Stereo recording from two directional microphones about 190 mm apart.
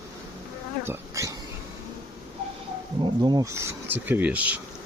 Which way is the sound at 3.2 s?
20° right (ahead or behind).